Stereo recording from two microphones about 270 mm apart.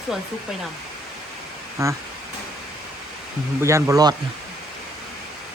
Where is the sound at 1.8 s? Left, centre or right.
Centre.